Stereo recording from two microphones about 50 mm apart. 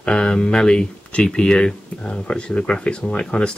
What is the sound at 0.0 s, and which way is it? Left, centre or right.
Speech, centre.